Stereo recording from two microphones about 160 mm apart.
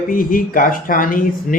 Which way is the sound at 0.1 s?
60° left (ahead or behind).